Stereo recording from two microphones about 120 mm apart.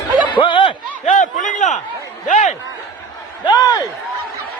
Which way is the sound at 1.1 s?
90° left.